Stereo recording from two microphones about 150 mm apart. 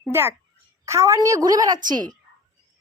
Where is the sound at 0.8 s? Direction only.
20° right (ahead or behind).